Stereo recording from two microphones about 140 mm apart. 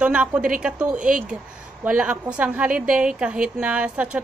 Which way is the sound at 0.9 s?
70° right (ahead or behind).